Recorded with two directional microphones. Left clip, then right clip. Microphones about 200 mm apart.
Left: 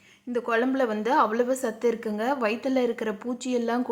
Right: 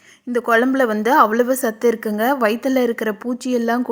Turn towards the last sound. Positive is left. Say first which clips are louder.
# right 7 dB
turn(degrees=-35)  # may be behind; listen again after turning